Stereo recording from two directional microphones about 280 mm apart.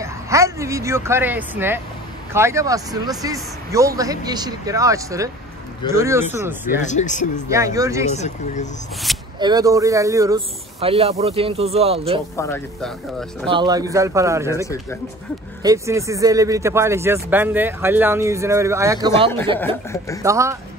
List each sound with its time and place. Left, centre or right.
0.0 s speech: centre
6.8 s speech: left
7.4 s speech: centre
8.1 s speech: left
9.4 s speech: centre
12.4 s speech: centre
13.5 s speech: centre